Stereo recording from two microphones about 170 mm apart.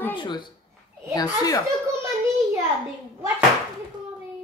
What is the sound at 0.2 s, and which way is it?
Speech, 25° left (ahead or behind).